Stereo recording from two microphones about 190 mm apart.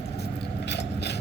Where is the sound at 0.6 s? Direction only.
60° left (ahead or behind).